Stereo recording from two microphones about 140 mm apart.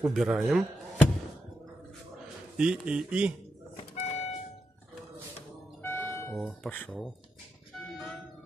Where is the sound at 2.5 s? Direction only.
5° right (ahead or behind).